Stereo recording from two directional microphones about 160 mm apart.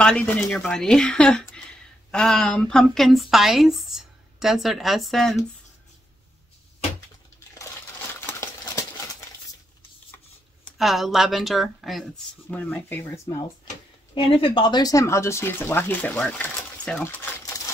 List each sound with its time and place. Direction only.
0.0 s speech: 5° left (ahead or behind)
7.5 s a sound: 15° left (ahead or behind)
10.6 s speech: centre (ahead or behind); by 13.5 s 20° left (ahead or behind)
14.1 s speech: 35° left (ahead or behind); by 16.9 s 10° left (ahead or behind)
17.0 s coin: 10° left (ahead or behind)